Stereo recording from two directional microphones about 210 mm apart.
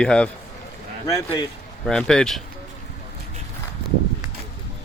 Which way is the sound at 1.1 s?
15° left (ahead or behind).